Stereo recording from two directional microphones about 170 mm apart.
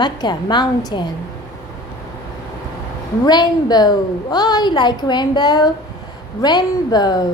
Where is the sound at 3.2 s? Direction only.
25° left (ahead or behind).